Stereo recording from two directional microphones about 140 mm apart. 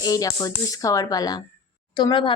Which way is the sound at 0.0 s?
25° left (ahead or behind).